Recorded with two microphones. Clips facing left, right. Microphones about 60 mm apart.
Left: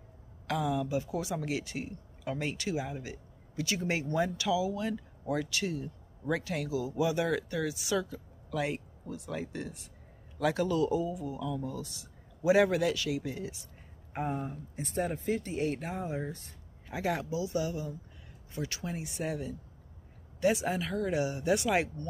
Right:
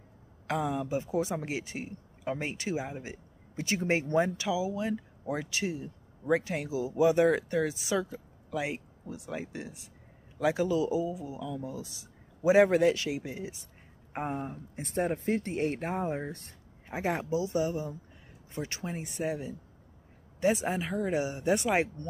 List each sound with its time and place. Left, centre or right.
0.5 s a man's voice: right
14.8 s speech: right
16.9 s a man's voice: right